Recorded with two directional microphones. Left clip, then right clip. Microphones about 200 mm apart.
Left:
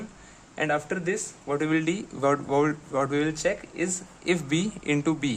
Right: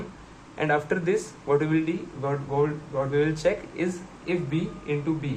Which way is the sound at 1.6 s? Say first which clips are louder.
Even; 35° left (ahead or behind).